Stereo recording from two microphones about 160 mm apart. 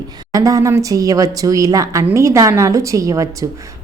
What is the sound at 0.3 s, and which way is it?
A woman's voice, 20° right (ahead or behind).